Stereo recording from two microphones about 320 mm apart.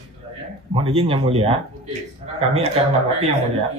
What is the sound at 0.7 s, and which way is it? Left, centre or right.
Speech, centre.